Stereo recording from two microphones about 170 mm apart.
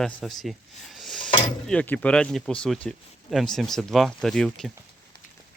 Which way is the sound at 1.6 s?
5° left (ahead or behind).